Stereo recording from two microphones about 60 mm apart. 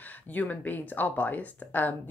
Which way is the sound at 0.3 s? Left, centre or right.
Left.